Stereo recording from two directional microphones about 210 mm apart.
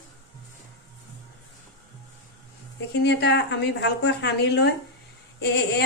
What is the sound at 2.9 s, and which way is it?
A woman's voice, 55° left (ahead or behind).